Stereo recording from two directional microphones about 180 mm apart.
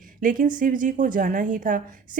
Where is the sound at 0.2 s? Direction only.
50° right (ahead or behind).